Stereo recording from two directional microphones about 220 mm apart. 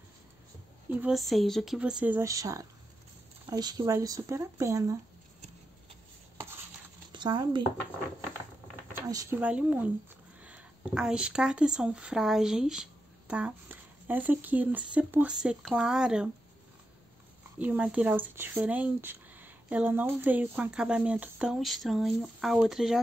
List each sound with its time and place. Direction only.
0.9 s speech: 5° right (ahead or behind)
7.1 s speech: 20° right (ahead or behind)
8.9 s speech: 15° right (ahead or behind)
17.6 s speech: 5° right (ahead or behind)